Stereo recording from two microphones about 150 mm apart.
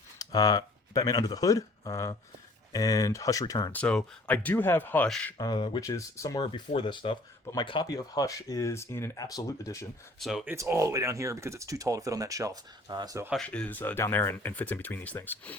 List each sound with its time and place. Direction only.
0.2 s speech: 25° left (ahead or behind)
3.7 s speech: 10° left (ahead or behind)
5.4 s speech: 30° left (ahead or behind)
6.7 s speech: 30° left (ahead or behind)
10.2 s speech: centre (ahead or behind)
10.4 s speech: 15° right (ahead or behind)
13.3 s speech: 5° left (ahead or behind)